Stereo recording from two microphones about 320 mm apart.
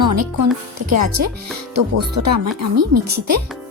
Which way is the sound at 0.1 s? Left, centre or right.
Right.